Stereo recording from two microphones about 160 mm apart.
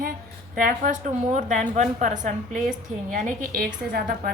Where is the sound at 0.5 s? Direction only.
55° right (ahead or behind).